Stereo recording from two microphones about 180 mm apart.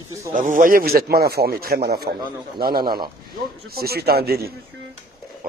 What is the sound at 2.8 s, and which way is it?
Speech, 25° right (ahead or behind).